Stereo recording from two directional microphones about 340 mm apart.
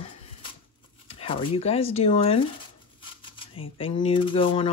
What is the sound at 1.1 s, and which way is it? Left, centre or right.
Speech, centre.